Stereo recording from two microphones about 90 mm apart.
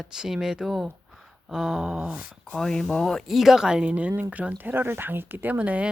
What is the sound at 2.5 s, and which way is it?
Speech, 5° left (ahead or behind).